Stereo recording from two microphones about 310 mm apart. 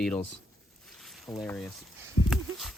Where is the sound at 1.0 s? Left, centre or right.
Centre.